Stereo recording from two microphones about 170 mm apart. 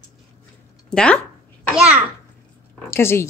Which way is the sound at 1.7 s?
5° right (ahead or behind).